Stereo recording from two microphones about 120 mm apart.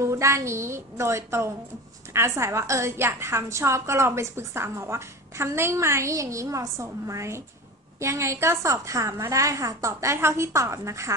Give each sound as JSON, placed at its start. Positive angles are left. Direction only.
{"t": 0.0, "sound": "a woman's voice", "side_deg": -25}